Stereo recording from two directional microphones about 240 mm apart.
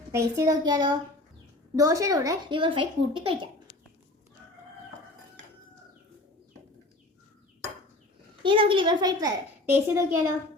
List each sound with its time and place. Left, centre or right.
0.1 s speech: centre
8.4 s speech: right